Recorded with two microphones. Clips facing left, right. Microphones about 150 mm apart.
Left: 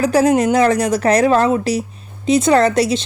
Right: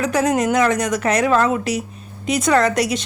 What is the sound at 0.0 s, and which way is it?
A woman's voice, 30° left (ahead or behind).